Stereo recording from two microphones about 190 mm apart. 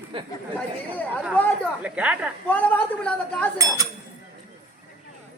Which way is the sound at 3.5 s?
15° right (ahead or behind).